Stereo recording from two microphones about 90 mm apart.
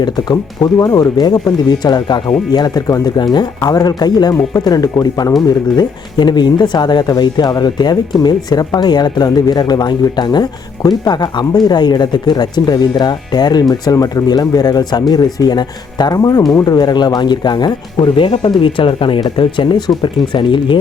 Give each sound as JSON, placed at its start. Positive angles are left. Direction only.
{"t": 0.0, "sound": "speech", "side_deg": 45}